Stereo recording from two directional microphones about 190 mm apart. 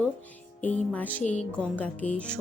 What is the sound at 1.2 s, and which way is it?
Speech, 35° left (ahead or behind).